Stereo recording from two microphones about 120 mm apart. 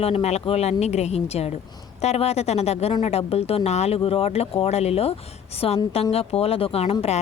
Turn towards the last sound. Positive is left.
turn(degrees=60)  # may be behind; listen again after turning